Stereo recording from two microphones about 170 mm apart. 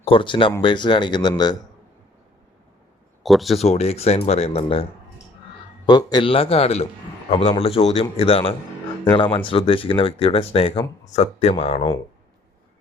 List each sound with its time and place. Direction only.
0.0 s speech: 30° left (ahead or behind)
3.2 s speech: centre (ahead or behind)
3.6 s speech: 40° left (ahead or behind)
5.8 s speech: 25° left (ahead or behind)